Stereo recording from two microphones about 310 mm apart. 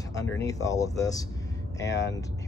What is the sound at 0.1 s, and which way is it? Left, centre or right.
Speech, centre.